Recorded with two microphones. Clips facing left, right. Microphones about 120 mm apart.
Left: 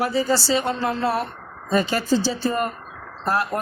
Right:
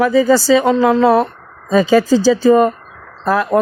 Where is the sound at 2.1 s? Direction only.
90° right.